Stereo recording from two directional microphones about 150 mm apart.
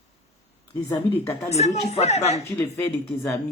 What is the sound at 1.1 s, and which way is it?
Speech, 15° left (ahead or behind).